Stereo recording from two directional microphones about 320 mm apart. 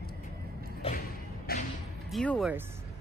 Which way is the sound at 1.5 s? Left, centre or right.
Left.